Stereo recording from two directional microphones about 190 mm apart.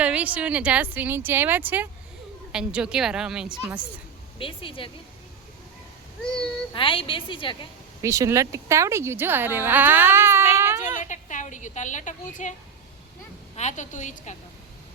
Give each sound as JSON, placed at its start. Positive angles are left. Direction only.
{"t": 0.0, "sound": "a woman's voice", "side_deg": -5}
{"t": 4.4, "sound": "a woman's voice", "side_deg": 25}
{"t": 6.2, "sound": "a sound", "side_deg": 5}
{"t": 6.7, "sound": "a woman's voice", "side_deg": 25}
{"t": 8.0, "sound": "speech", "side_deg": -15}
{"t": 11.0, "sound": "a woman's voice", "side_deg": 40}
{"t": 13.6, "sound": "a woman's voice", "side_deg": 40}